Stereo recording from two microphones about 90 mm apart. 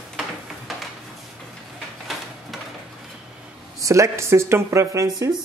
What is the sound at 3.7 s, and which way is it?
Speech, 35° right (ahead or behind).